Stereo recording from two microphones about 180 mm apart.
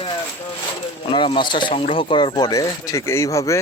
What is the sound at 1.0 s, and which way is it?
Speech, 30° left (ahead or behind).